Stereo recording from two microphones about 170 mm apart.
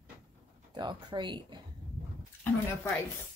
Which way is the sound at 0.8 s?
25° right (ahead or behind).